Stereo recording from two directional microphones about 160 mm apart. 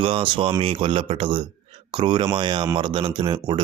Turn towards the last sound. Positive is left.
turn(degrees=-30)  # may be behind; listen again after turning